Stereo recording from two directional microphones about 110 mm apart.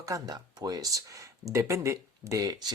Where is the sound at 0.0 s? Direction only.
30° right (ahead or behind).